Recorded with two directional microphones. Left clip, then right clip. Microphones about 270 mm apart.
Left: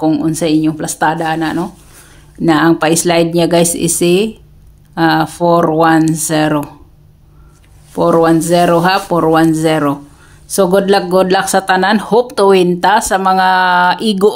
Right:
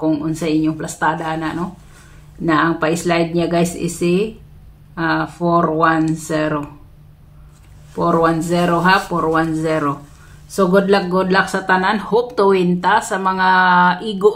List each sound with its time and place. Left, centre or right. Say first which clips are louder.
0.0 s speech: left 6 dB; left
7.9 s speech: left 6 dB; left